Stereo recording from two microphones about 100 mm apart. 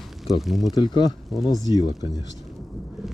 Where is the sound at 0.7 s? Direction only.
45° left (ahead or behind).